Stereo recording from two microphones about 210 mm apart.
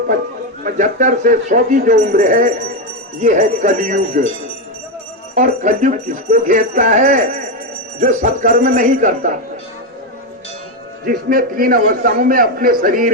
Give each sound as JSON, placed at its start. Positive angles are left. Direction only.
{"t": 0.6, "sound": "speech", "side_deg": -35}
{"t": 5.3, "sound": "speech", "side_deg": -35}
{"t": 11.0, "sound": "a man's voice", "side_deg": -45}